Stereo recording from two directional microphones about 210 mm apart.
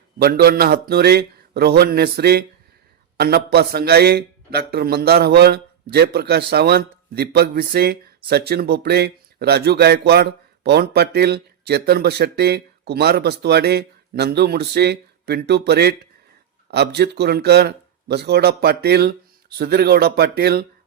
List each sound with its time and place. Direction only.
0.2 s a man's voice: 45° right (ahead or behind)